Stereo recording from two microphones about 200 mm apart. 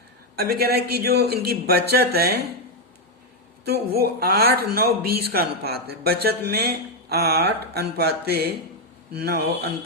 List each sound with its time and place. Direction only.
0.3 s speech: 50° right (ahead or behind)
3.7 s speech: 50° right (ahead or behind)